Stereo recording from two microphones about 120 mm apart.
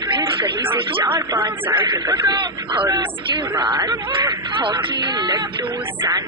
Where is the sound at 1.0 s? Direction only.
40° right (ahead or behind).